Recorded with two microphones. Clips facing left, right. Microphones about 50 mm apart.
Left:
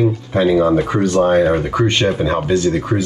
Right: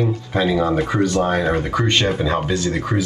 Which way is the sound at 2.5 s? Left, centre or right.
Left.